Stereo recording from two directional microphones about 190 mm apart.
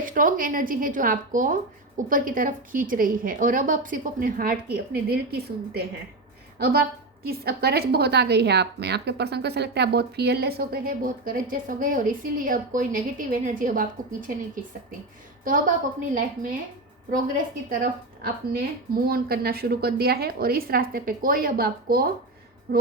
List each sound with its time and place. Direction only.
0.0 s a woman's voice: 45° right (ahead or behind)
7.3 s a woman's voice: 55° right (ahead or behind)
17.1 s a woman's voice: 45° right (ahead or behind)